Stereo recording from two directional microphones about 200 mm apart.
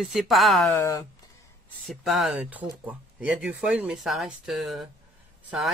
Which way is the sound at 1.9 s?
Centre (ahead or behind).